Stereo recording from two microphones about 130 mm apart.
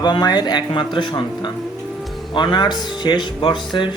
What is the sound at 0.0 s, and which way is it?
Speech, 35° left (ahead or behind).